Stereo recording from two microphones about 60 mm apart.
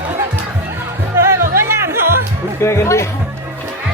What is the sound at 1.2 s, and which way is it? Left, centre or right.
Music, right.